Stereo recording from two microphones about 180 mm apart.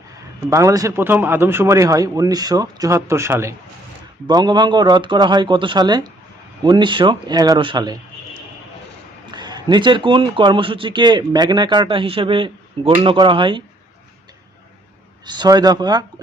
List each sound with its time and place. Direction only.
0.5 s speech: 20° right (ahead or behind)
9.3 s speech: 25° right (ahead or behind)
15.3 s speech: 25° right (ahead or behind)